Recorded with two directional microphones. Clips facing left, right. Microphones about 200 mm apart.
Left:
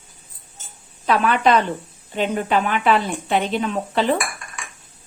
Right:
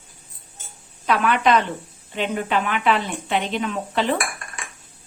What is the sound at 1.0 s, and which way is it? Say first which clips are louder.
Speech: left 2 dB; 35° left (ahead or behind).